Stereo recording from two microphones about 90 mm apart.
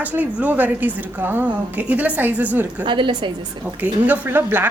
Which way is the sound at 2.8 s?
60° right (ahead or behind).